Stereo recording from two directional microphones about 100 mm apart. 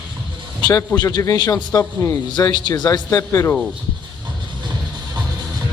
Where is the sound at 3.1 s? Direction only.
30° left (ahead or behind).